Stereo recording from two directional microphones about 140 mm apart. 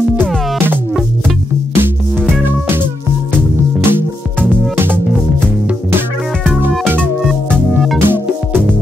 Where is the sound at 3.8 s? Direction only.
15° right (ahead or behind).